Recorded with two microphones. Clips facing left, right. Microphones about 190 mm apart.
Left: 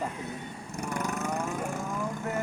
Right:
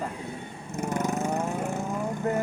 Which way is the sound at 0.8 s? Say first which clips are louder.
Right 5 dB; 20° right (ahead or behind).